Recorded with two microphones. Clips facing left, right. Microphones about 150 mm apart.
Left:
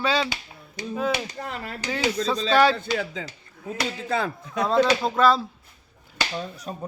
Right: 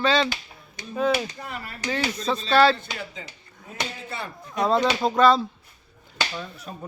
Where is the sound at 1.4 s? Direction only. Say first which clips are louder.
Left 3 dB; 80° left.